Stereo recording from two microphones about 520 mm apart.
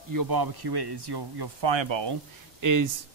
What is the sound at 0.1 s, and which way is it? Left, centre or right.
Speech, right.